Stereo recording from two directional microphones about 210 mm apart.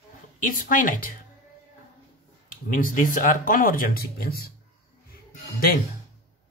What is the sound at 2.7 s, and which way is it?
Speech, 40° left (ahead or behind).